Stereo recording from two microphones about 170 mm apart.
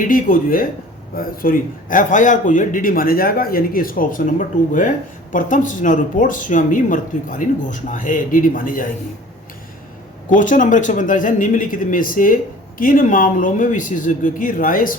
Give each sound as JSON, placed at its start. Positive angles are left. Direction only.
{"t": 0.0, "sound": "a man's voice", "side_deg": 55}
{"t": 10.2, "sound": "speech", "side_deg": 50}